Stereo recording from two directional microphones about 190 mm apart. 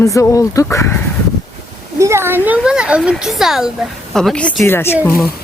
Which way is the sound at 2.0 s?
15° right (ahead or behind).